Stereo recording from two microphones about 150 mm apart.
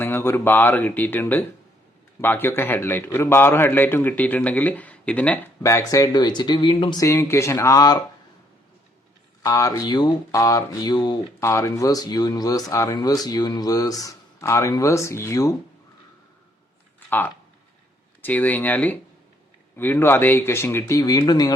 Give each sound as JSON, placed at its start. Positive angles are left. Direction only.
{"t": 0.0, "sound": "a man's voice", "side_deg": 15}
{"t": 5.6, "sound": "speech", "side_deg": 20}
{"t": 7.0, "sound": "speech", "side_deg": 20}
{"t": 9.4, "sound": "speech", "side_deg": 20}
{"t": 11.3, "sound": "speech", "side_deg": 20}
{"t": 17.1, "sound": "a man's voice", "side_deg": 15}